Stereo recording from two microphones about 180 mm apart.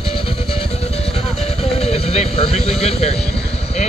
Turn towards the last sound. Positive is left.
turn(degrees=35)  # may be behind; listen again after turning